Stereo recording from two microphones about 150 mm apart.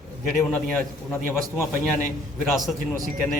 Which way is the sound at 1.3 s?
10° left (ahead or behind).